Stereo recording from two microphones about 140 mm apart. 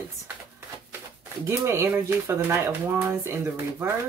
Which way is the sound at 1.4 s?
20° right (ahead or behind).